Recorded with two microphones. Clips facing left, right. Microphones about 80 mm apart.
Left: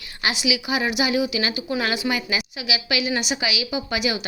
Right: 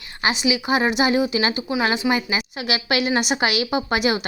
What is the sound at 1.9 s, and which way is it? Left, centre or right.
Speech, right.